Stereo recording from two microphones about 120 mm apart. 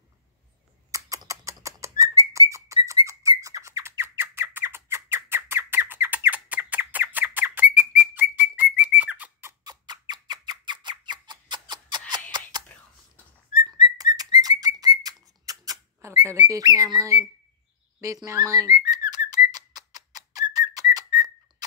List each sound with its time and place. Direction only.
0.9 s bird: 30° right (ahead or behind)
9.7 s a sound: 35° right (ahead or behind)
13.6 s bird: 35° right (ahead or behind); by 16.4 s 20° right (ahead or behind)
16.4 s bird: 30° right (ahead or behind)
18.0 s whistling: 25° right (ahead or behind)